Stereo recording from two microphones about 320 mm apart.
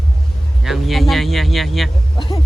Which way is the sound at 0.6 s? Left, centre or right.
Centre.